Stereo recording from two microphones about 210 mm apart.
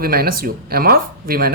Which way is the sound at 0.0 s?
45° right (ahead or behind).